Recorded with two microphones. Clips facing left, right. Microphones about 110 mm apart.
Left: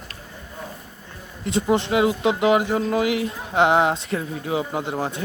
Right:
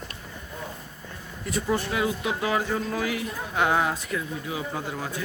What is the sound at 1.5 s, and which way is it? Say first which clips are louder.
Speech: left 6 dB; 25° left (ahead or behind).